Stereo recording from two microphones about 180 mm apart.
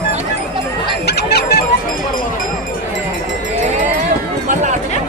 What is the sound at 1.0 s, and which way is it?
Music, 65° left (ahead or behind).